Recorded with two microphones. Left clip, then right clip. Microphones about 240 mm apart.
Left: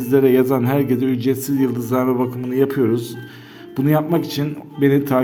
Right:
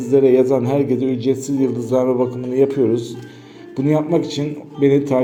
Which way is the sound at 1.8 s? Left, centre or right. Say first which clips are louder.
Right 2 dB; left.